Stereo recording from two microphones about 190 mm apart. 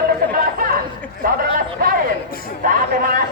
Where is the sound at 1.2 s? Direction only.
50° right (ahead or behind).